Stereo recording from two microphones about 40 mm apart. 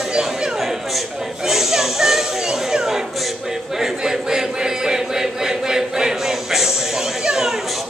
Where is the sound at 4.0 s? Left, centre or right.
Centre.